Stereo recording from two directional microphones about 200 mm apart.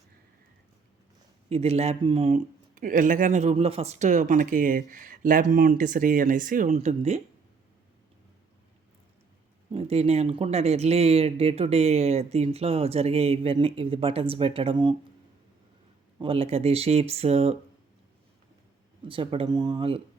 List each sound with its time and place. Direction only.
1.5 s speech: 30° right (ahead or behind)
9.7 s speech: 30° right (ahead or behind)
16.1 s speech: 25° right (ahead or behind)
19.0 s speech: 25° right (ahead or behind)